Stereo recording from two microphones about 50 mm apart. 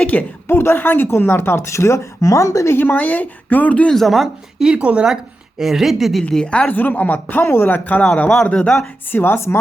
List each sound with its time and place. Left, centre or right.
0.0 s a sound: left
0.4 s speech: left
2.7 s a woman's voice: left
3.8 s speech: centre
4.8 s speech: right
5.0 s speech: centre
6.4 s speech: left
6.7 s a woman's voice: left
7.4 s speech: left
7.7 s a woman's voice: left
8.4 s speech: centre
9.1 s speech: left